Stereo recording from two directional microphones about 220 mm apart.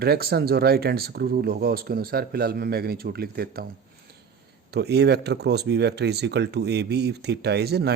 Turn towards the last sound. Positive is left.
turn(degrees=-50)  # may be behind; listen again after turning